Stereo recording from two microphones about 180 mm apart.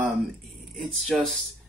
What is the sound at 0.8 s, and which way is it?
Speech, centre (ahead or behind).